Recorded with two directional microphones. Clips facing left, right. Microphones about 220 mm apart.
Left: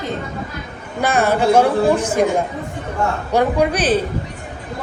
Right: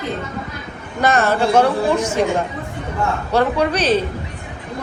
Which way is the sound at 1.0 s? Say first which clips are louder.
Even; 10° left (ahead or behind).